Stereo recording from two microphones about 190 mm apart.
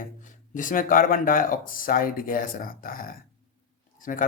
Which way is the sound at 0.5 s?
45° left (ahead or behind).